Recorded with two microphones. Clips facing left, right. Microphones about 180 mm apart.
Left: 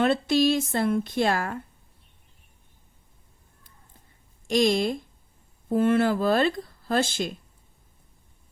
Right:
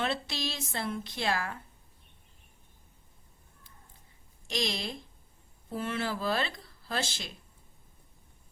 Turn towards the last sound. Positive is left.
turn(degrees=50)  # may be behind; listen again after turning